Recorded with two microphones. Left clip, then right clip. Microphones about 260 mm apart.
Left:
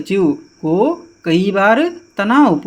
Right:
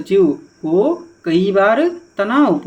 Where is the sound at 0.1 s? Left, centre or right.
Left.